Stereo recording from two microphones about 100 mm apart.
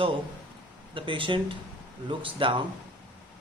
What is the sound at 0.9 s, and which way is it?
Speech, 60° right (ahead or behind).